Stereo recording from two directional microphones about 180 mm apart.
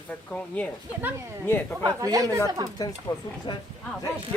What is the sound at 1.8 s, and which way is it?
Speech, 20° right (ahead or behind).